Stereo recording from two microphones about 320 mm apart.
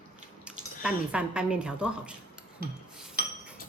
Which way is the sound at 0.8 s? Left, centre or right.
Centre.